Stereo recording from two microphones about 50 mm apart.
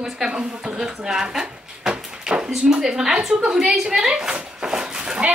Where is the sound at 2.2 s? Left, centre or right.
Centre.